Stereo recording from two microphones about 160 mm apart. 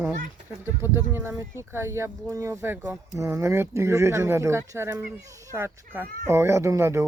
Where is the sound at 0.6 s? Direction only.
15° right (ahead or behind).